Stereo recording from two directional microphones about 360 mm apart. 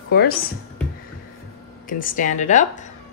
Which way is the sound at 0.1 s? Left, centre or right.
Left.